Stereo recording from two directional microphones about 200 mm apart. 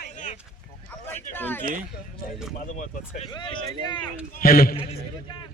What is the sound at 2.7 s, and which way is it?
Speech, 40° left (ahead or behind).